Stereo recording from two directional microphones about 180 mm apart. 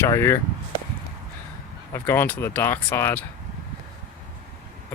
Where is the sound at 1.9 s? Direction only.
10° left (ahead or behind).